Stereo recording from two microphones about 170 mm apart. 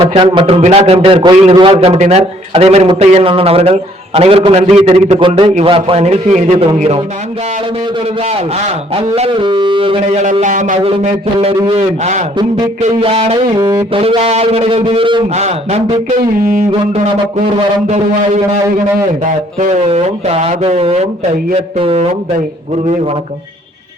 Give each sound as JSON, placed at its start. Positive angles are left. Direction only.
{"t": 0.0, "sound": "a man's voice", "side_deg": -30}
{"t": 9.0, "sound": "a man's voice", "side_deg": -35}
{"t": 10.4, "sound": "speech", "side_deg": -45}
{"t": 10.8, "sound": "a man's voice", "side_deg": -35}
{"t": 14.0, "sound": "a man's voice", "side_deg": -35}
{"t": 16.4, "sound": "music", "side_deg": -55}
{"t": 17.8, "sound": "a man's voice", "side_deg": -40}
{"t": 19.5, "sound": "a man's voice", "side_deg": -40}